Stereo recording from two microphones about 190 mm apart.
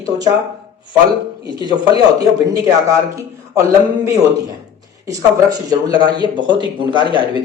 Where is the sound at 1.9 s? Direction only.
20° right (ahead or behind).